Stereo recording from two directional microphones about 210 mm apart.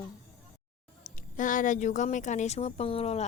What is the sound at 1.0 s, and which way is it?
Speech, 40° left (ahead or behind).